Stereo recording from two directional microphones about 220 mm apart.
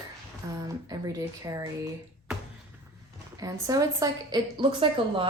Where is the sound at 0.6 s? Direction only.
15° right (ahead or behind).